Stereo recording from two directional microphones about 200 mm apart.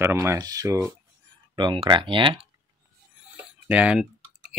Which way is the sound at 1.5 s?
25° right (ahead or behind).